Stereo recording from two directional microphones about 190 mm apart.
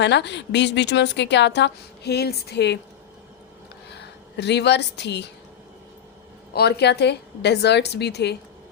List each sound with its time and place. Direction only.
0.0 s a woman's voice: 65° left (ahead or behind)
3.9 s speech: 65° left (ahead or behind)
6.5 s a woman's voice: 60° left (ahead or behind)